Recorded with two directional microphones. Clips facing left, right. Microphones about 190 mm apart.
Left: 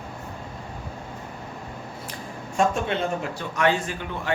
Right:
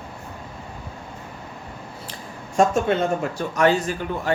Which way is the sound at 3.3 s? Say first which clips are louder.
Right 3 dB; 40° right (ahead or behind).